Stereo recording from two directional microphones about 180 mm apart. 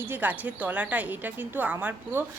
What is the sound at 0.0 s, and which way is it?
Speech, 10° right (ahead or behind).